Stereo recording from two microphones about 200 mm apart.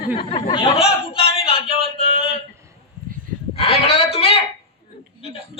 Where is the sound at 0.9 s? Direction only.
30° left (ahead or behind).